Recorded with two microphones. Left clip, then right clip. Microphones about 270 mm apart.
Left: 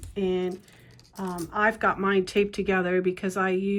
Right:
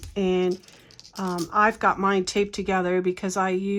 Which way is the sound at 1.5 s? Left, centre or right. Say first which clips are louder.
Right 3 dB; centre.